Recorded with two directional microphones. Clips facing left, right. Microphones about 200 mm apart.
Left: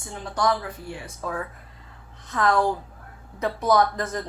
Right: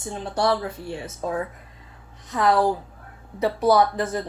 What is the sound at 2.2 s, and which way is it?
Speech, 15° right (ahead or behind).